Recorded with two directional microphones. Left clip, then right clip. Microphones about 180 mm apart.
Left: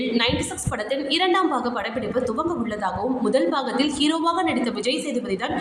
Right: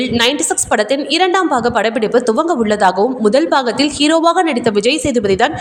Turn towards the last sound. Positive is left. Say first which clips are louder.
# right 13 dB
turn(degrees=-50)  # may be behind; listen again after turning